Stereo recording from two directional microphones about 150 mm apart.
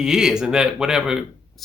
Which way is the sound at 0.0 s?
5° right (ahead or behind).